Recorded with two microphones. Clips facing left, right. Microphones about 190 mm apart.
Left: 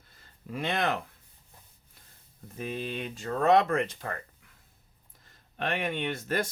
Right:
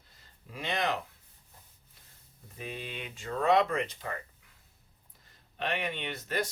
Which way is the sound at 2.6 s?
45° left (ahead or behind).